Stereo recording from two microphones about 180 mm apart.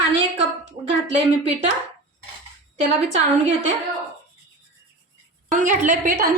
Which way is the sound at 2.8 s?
40° right (ahead or behind).